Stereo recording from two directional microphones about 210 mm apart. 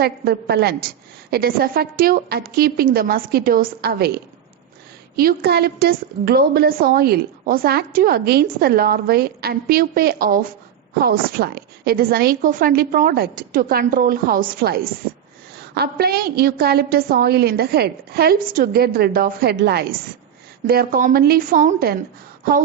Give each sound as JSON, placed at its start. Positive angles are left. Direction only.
{"t": 0.0, "sound": "a woman's voice", "side_deg": -50}
{"t": 5.1, "sound": "a woman's voice", "side_deg": -45}